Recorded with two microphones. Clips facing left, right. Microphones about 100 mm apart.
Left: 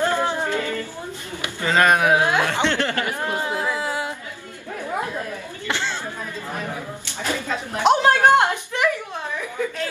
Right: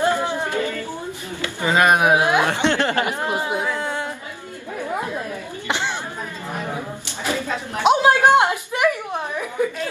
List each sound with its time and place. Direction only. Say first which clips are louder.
0.0 s music: right 1 dB; 15° right (ahead or behind)
1.6 s chuckle: right 1 dB; 15° right (ahead or behind)
3.6 s music: even; 5° left (ahead or behind)
5.7 s chatter: right 2 dB; 15° right (ahead or behind)
7.8 s a sound: right 1 dB; 5° right (ahead or behind)